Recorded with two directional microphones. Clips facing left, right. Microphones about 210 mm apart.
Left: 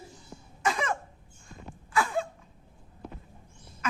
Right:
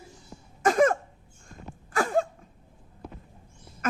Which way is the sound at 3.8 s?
50° right (ahead or behind).